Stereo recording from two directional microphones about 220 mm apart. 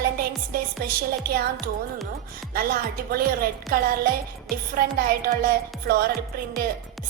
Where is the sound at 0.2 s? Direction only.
40° right (ahead or behind).